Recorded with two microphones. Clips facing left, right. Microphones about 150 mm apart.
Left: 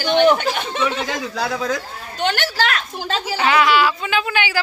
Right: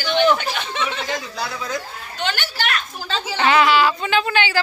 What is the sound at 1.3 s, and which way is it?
Speech, 85° left.